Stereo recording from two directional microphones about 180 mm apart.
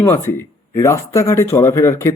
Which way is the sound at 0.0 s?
15° left (ahead or behind).